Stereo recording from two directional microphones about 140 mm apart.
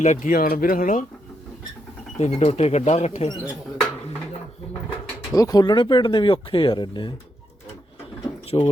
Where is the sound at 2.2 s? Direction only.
50° left (ahead or behind).